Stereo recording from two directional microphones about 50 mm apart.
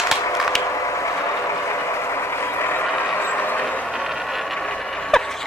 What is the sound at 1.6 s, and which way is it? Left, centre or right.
Vehicle, left.